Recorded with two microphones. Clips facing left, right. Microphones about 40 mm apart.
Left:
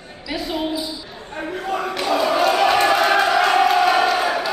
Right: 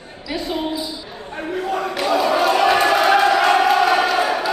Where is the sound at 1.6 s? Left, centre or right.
Centre.